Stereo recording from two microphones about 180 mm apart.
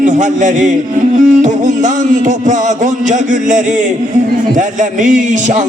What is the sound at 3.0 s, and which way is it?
Speech, 45° right (ahead or behind).